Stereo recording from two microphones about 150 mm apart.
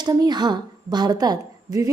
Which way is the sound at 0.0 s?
25° right (ahead or behind).